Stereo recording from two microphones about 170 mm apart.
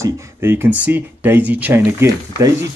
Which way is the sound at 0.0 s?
15° right (ahead or behind).